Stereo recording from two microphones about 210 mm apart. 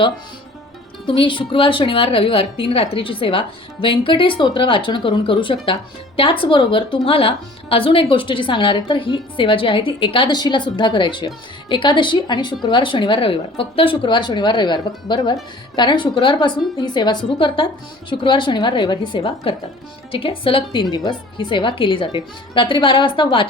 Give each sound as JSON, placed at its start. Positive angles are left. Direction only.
{"t": 1.0, "sound": "speech", "side_deg": 25}